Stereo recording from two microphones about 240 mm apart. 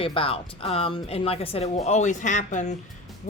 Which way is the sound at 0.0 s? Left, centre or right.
Left.